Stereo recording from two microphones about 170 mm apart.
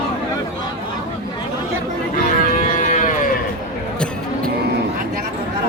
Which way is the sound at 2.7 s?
50° left (ahead or behind).